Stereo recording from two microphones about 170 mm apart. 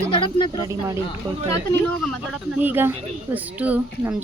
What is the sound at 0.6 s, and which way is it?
Speech, 20° right (ahead or behind).